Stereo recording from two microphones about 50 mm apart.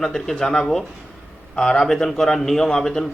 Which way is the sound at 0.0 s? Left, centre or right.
Centre.